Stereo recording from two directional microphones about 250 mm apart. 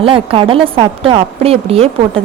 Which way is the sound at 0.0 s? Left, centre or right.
Right.